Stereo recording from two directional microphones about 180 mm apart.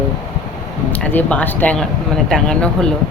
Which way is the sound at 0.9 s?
5° left (ahead or behind).